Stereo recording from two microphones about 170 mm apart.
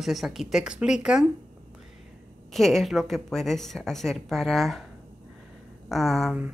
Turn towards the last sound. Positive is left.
turn(degrees=0)  # may be behind; listen again after turning